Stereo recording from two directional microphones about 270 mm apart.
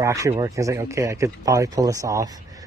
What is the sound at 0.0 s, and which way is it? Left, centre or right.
Speech, centre.